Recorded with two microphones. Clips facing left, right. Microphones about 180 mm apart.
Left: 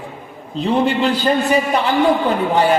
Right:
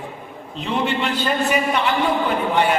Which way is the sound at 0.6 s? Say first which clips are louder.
Left 6 dB; 35° left (ahead or behind).